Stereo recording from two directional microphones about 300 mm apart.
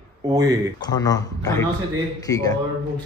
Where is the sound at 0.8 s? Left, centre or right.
Centre.